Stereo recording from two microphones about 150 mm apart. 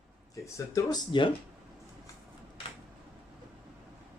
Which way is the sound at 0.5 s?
20° left (ahead or behind).